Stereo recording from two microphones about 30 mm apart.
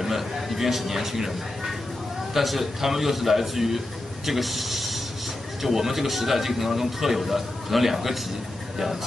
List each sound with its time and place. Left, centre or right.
0.0 s a man's voice: centre